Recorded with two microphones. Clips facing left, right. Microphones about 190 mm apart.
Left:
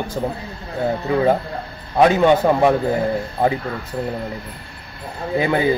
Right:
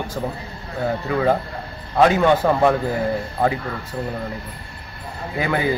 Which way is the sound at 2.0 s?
20° left (ahead or behind).